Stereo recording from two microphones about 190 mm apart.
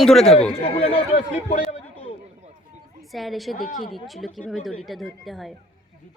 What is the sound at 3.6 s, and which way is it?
Speech, 45° left (ahead or behind).